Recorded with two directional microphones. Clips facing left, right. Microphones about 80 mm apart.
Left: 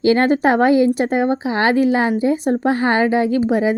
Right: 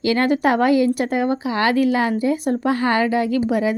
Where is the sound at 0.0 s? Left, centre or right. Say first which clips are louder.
Left 3 dB; left.